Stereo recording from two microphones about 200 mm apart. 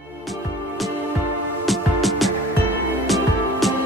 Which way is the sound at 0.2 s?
Centre (ahead or behind).